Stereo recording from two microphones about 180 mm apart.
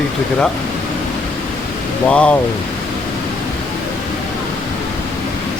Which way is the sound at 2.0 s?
5° left (ahead or behind).